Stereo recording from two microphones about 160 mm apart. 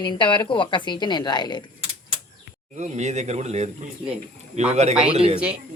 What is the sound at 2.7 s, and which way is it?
Speech, 45° right (ahead or behind).